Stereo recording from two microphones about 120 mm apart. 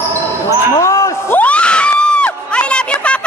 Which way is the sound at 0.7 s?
25° left (ahead or behind).